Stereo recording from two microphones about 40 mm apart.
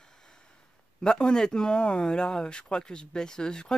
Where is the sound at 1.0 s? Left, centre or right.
Centre.